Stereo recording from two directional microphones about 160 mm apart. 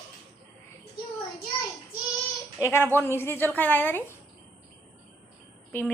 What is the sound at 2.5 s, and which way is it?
A woman's voice, 15° left (ahead or behind).